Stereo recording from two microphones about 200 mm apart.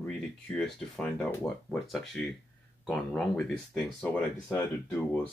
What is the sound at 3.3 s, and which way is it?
Speech, 5° left (ahead or behind).